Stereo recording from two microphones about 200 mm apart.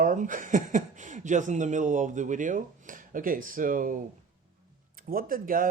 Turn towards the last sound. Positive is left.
turn(degrees=-45)  # may be behind; listen again after turning